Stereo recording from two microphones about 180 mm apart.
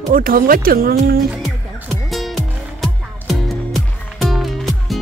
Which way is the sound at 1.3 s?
5° right (ahead or behind).